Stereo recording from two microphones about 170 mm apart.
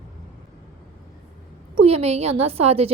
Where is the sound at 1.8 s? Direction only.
35° right (ahead or behind).